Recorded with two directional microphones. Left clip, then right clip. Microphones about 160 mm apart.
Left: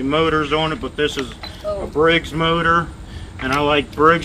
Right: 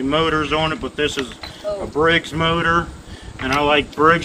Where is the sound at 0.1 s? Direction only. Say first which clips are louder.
Left 1 dB; 10° right (ahead or behind).